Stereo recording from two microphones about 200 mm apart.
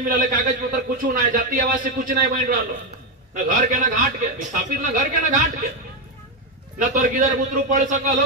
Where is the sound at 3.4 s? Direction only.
40° right (ahead or behind).